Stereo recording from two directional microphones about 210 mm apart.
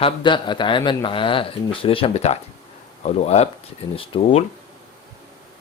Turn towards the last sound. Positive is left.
turn(degrees=30)  # may be behind; listen again after turning